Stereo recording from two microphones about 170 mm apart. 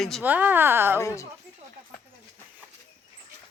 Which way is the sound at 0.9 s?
15° left (ahead or behind).